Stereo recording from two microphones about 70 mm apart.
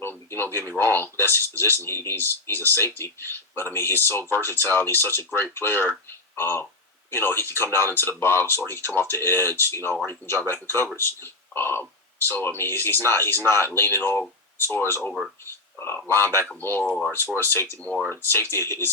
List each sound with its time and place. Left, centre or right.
0.0 s speech: left